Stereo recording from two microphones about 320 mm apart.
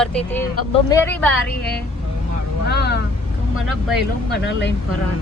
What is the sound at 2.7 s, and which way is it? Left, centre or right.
Speech, left.